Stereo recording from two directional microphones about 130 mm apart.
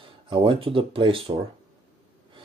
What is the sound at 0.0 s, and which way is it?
Speech, 40° right (ahead or behind).